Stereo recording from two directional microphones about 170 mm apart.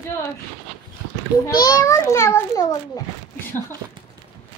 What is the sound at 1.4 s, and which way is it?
A child's voice, 20° left (ahead or behind).